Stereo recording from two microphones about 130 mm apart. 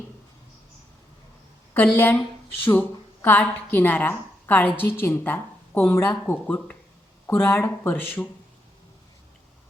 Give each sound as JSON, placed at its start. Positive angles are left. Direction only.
{"t": 1.7, "sound": "a woman's voice", "side_deg": 15}